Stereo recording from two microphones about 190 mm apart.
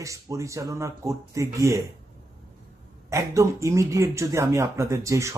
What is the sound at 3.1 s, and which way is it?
Speech, 15° right (ahead or behind).